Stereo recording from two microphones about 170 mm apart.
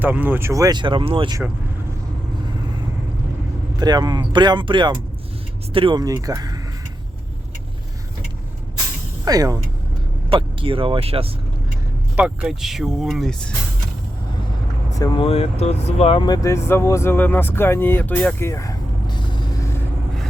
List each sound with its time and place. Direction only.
0.0 s speech: 10° right (ahead or behind); by 1.4 s 30° right (ahead or behind)
3.8 s speech: 25° right (ahead or behind)
9.2 s speech: 20° right (ahead or behind)
12.1 s speech: 5° right (ahead or behind)
14.9 s speech: 20° left (ahead or behind)
15.3 s speech: 35° left (ahead or behind)